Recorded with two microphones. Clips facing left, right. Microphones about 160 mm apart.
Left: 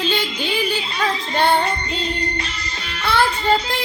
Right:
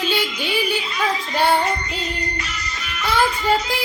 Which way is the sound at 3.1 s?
10° right (ahead or behind).